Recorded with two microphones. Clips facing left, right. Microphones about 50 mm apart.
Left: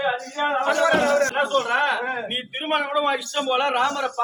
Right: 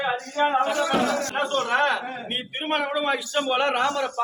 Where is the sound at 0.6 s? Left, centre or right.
Left.